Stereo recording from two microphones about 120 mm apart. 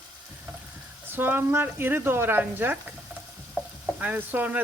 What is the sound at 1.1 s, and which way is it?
Speech, 15° right (ahead or behind).